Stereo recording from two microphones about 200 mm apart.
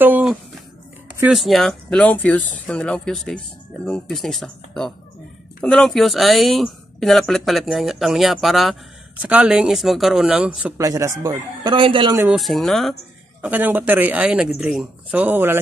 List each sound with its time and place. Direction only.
0.0 s speech: 5° right (ahead or behind)
10.8 s speech: 15° right (ahead or behind)
12.2 s speech: 5° right (ahead or behind)